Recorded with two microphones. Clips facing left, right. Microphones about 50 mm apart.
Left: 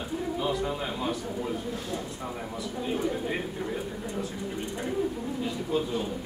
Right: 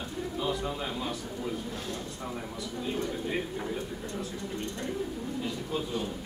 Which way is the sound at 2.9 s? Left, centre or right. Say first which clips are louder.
Left 4 dB; centre.